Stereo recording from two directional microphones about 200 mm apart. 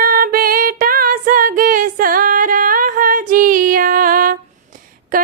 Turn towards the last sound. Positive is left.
turn(degrees=-45)  # may be behind; listen again after turning